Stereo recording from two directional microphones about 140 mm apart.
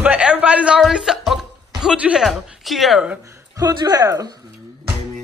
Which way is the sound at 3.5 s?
25° right (ahead or behind).